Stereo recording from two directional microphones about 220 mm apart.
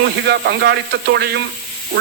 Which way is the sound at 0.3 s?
50° right (ahead or behind).